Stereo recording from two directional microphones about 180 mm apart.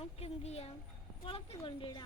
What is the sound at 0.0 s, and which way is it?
A woman's voice, 35° left (ahead or behind).